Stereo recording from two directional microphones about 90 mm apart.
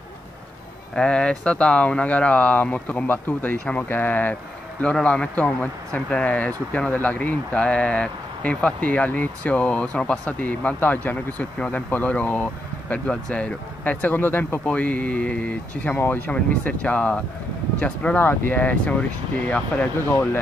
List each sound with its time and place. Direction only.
0.9 s speech: 10° left (ahead or behind)